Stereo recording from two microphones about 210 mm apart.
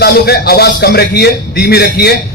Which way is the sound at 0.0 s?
50° left (ahead or behind).